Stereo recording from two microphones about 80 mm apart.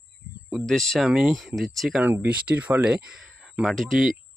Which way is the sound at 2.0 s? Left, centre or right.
Right.